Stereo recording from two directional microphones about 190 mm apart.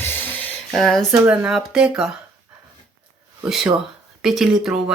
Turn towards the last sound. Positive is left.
turn(degrees=0)  # may be behind; listen again after turning